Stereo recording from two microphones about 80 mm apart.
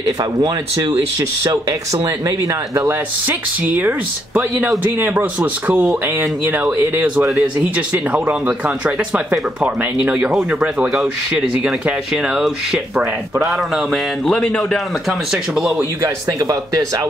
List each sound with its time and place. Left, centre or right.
0.0 s speech: right
2.0 s speech: right
2.9 s speech: right
10.9 s speech: centre
13.0 s speech: right
13.5 s a man's voice: centre
16.3 s speech: right